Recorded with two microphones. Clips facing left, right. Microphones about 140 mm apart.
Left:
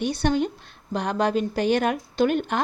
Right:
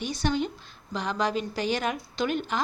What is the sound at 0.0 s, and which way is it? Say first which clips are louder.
A woman's voice: left 5 dB; 60° left (ahead or behind).